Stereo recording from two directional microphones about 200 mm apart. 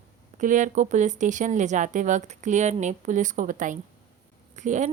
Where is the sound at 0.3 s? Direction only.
40° right (ahead or behind).